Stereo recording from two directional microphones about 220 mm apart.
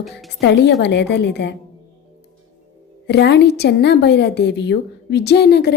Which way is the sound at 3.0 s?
50° left (ahead or behind).